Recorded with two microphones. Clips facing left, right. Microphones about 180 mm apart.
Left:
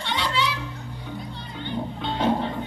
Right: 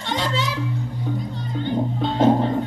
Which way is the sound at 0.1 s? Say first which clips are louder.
Right 2 dB; 45° right (ahead or behind).